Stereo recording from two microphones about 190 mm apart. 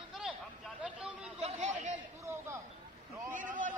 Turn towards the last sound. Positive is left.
turn(degrees=-45)  # may be behind; listen again after turning